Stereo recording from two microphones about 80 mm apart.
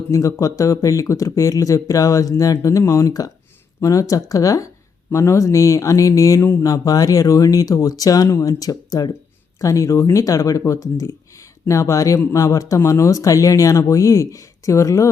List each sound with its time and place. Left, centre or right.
0.1 s speech: left